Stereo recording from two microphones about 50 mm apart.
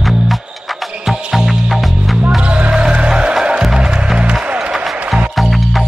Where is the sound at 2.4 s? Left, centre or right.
Right.